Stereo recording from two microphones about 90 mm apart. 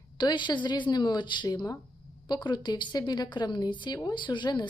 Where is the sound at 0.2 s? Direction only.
60° left (ahead or behind).